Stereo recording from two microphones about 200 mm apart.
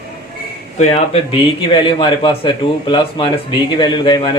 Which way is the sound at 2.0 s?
25° left (ahead or behind).